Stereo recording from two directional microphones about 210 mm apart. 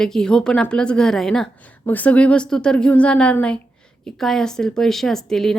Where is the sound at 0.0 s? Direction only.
5° left (ahead or behind).